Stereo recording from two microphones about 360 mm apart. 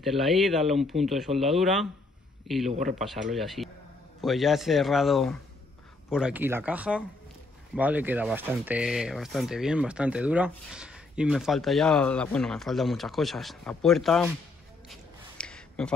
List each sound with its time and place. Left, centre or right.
0.0 s a man's voice: centre
2.7 s a man's voice: right
3.0 s speech: centre
14.9 s a sound: centre